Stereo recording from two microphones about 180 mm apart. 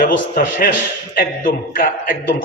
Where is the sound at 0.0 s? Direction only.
50° left (ahead or behind).